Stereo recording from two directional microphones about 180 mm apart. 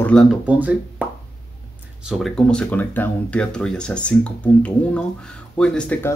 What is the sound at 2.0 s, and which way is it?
Speech, centre (ahead or behind).